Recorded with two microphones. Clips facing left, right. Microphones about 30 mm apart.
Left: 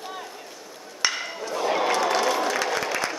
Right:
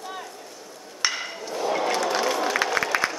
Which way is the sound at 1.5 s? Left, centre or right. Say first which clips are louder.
Left 1 dB; centre.